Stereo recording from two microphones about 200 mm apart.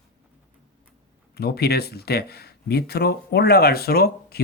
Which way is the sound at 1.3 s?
50° left (ahead or behind).